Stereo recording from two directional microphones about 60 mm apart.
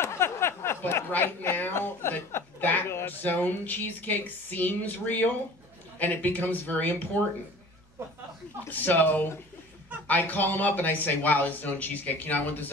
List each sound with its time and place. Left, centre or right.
0.0 s a sound: left
1.1 s speech: left
8.6 s speech: left